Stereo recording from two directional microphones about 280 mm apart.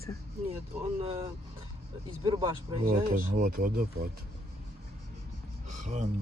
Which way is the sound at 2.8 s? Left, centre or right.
Right.